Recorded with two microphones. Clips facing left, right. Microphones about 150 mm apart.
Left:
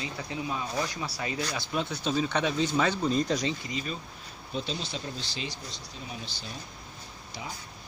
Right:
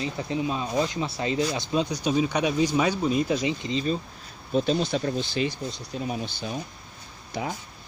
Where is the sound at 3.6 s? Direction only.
30° right (ahead or behind).